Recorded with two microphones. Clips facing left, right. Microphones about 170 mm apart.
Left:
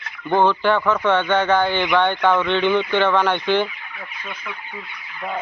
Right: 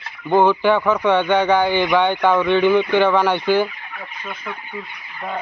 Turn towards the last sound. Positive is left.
turn(degrees=-10)  # may be behind; listen again after turning